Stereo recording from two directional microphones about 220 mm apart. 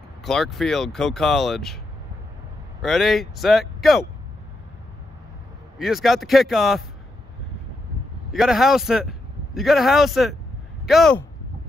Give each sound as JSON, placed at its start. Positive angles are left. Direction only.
{"t": 0.2, "sound": "speech", "side_deg": 0}
{"t": 2.8, "sound": "speech", "side_deg": 0}
{"t": 5.8, "sound": "speech", "side_deg": 0}
{"t": 8.3, "sound": "speech", "side_deg": 0}